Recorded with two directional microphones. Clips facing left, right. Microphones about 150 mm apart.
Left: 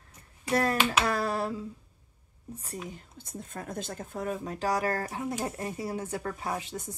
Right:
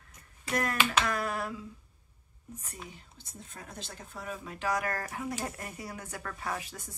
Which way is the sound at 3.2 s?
55° left (ahead or behind).